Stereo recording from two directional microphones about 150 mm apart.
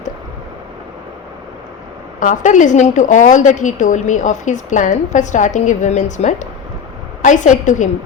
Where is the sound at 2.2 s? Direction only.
55° left (ahead or behind).